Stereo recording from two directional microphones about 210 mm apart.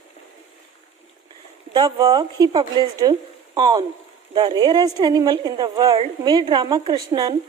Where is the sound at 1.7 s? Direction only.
20° right (ahead or behind).